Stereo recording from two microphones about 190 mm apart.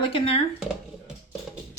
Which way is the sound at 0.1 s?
30° left (ahead or behind).